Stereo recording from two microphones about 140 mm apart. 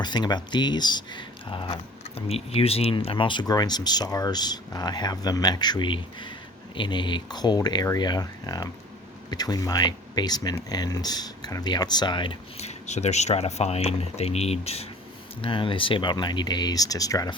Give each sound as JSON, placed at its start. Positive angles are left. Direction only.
{"t": 0.0, "sound": "speech", "side_deg": 30}
{"t": 12.5, "sound": "speech", "side_deg": 55}